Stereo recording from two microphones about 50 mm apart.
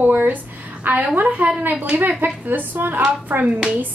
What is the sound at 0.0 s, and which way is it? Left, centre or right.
A woman's voice, right.